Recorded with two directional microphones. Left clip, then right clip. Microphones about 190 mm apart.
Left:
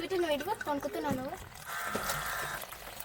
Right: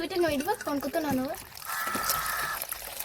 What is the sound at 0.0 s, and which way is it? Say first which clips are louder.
Speech: right 4 dB; 50° right (ahead or behind).